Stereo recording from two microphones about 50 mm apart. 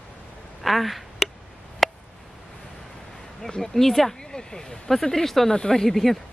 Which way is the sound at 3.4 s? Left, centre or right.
Centre.